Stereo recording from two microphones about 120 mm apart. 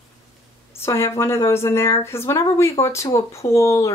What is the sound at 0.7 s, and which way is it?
Speech, 20° left (ahead or behind).